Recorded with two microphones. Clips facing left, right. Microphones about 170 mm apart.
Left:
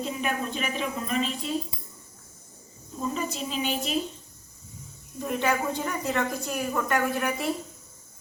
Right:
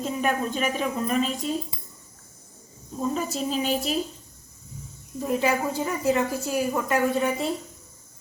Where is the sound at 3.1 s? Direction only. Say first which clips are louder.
Right 4 dB; 40° right (ahead or behind).